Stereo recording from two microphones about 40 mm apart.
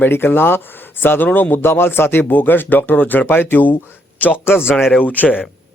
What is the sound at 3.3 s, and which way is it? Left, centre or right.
Speech, left.